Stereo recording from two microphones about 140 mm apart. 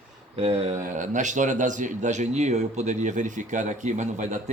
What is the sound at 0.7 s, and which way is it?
Speech, 60° right (ahead or behind).